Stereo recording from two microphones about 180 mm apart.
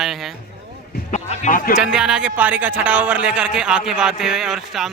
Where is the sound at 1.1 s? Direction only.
40° left (ahead or behind).